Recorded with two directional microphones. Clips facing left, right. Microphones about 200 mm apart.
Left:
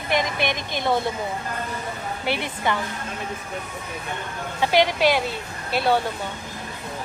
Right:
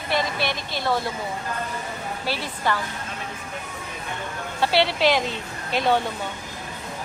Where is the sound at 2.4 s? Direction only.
20° left (ahead or behind).